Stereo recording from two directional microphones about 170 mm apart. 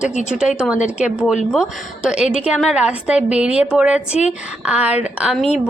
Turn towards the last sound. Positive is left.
turn(degrees=-5)  # may be behind; listen again after turning